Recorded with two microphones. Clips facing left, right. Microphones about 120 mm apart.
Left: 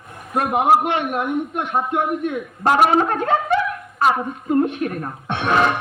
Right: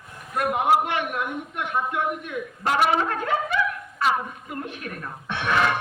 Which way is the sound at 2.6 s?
45° left (ahead or behind).